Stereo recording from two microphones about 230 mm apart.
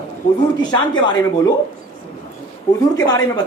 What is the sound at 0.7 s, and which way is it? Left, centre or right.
Speech, centre.